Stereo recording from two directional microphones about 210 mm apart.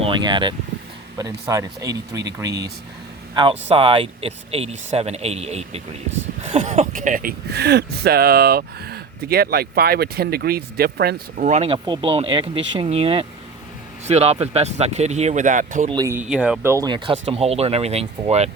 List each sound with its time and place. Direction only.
0.0 s speech: 20° right (ahead or behind)
3.3 s speech: 25° right (ahead or behind)
15.9 s speech: 15° right (ahead or behind)
16.3 s speech: 5° right (ahead or behind); by 18.5 s 30° right (ahead or behind)